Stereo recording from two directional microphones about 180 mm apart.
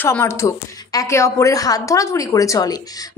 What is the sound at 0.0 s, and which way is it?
A woman's voice, 15° left (ahead or behind).